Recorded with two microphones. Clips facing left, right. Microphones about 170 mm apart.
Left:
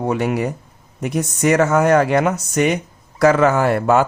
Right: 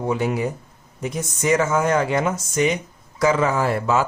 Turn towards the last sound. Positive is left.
turn(degrees=60)  # may be behind; listen again after turning